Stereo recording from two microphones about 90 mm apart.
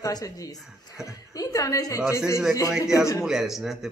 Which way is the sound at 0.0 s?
40° left (ahead or behind).